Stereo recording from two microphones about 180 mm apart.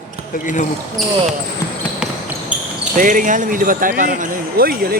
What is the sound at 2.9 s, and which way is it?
Speech, 45° right (ahead or behind).